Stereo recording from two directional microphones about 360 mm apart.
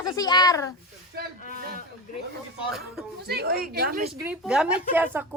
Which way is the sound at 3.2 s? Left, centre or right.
Right.